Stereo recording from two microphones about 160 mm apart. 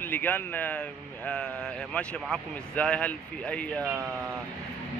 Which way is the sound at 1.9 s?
5° left (ahead or behind).